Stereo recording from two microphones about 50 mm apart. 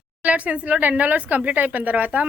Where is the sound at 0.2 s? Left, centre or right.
Right.